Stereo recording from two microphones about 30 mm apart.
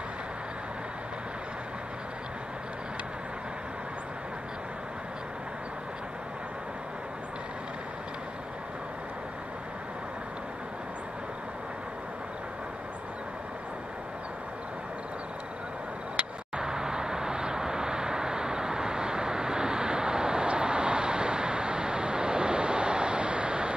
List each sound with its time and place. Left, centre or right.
16.6 s vehicle: right